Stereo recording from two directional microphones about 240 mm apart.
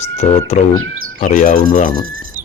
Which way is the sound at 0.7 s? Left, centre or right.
Right.